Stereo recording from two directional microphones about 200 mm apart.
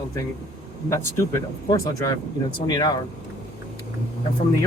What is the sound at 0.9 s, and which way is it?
Speech, 15° left (ahead or behind).